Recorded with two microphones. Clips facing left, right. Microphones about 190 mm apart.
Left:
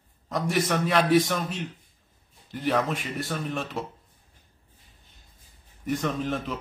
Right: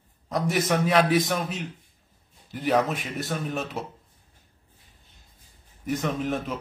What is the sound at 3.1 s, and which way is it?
Speech, centre (ahead or behind).